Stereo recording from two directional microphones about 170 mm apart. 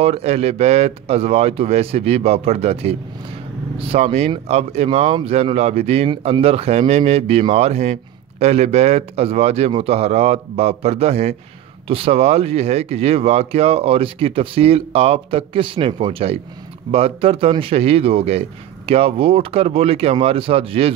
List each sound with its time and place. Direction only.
0.0 s speech: 35° right (ahead or behind)